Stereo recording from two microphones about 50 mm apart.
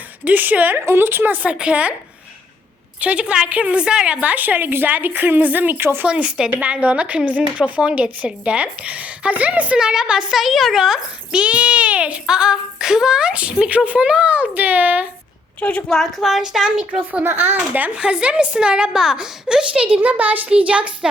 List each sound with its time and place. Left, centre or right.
0.3 s a woman's voice: right
0.9 s a woman's voice: right
1.5 s a woman's voice: right
3.0 s a woman's voice: right
6.1 s a woman's voice: right
9.7 s a child's voice: centre
10.3 s a child's voice: centre; by 15.0 s right
15.9 s speech: centre
16.2 s a child's voice: centre
16.9 s a woman's voice: right
17.2 s a woman's voice: right
17.9 s a woman's voice: right
20.0 s a woman's voice: right
20.5 s a woman's voice: right